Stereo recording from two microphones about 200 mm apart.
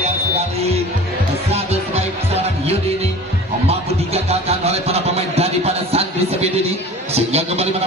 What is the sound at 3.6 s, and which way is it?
Music, 30° right (ahead or behind).